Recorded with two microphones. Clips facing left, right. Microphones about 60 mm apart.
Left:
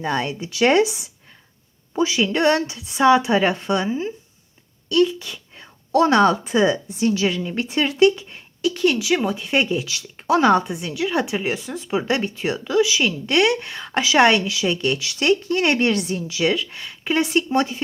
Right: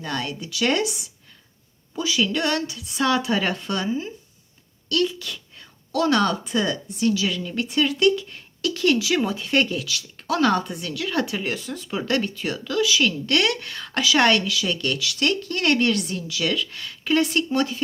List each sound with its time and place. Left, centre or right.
0.0 s a woman's voice: left
5.5 s a woman's voice: left
8.6 s speech: centre
9.8 s a woman's voice: left